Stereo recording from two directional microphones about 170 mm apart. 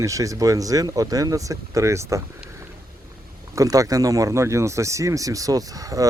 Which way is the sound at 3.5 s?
20° right (ahead or behind).